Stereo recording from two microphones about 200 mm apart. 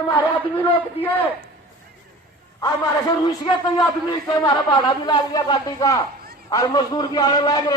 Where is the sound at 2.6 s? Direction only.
20° left (ahead or behind).